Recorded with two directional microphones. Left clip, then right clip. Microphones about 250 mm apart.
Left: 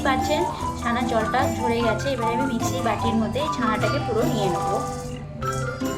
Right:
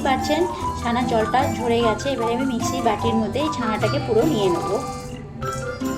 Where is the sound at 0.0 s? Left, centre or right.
Centre.